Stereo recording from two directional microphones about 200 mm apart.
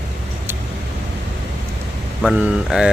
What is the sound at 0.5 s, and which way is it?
Vehicle, 10° right (ahead or behind).